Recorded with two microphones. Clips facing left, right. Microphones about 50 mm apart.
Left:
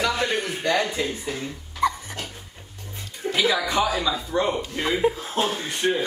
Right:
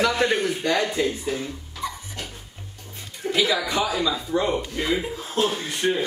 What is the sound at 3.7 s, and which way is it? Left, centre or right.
Speech, left.